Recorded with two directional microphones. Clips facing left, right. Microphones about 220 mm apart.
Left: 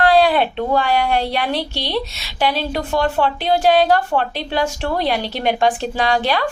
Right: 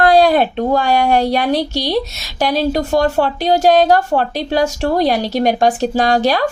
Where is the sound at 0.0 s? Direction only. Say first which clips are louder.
Right 3 dB; 45° right (ahead or behind).